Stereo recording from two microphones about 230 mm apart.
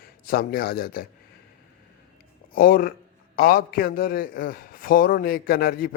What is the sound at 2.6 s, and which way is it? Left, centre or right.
A man's voice, left.